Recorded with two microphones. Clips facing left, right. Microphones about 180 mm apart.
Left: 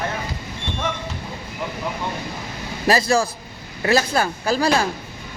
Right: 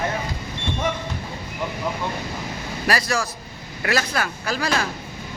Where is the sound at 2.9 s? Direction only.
25° left (ahead or behind).